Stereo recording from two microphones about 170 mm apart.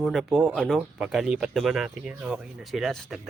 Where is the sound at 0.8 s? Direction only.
5° right (ahead or behind).